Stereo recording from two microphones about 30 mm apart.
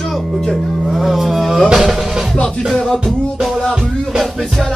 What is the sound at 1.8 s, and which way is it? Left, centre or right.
Music, centre.